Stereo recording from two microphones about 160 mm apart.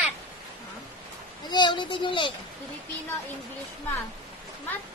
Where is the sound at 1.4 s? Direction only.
30° left (ahead or behind).